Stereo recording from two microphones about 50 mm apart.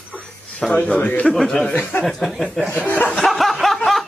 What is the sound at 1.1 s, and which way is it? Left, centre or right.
Speech, centre.